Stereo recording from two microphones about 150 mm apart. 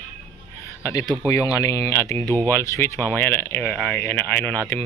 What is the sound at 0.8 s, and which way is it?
Speech, 20° left (ahead or behind).